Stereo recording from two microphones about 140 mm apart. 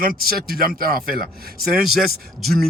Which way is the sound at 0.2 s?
90° right.